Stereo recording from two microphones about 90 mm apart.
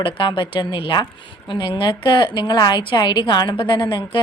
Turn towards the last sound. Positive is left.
turn(degrees=65)  # may be behind; listen again after turning